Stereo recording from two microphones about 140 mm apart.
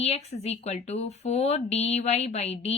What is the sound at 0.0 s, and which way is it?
Speech, 50° left (ahead or behind).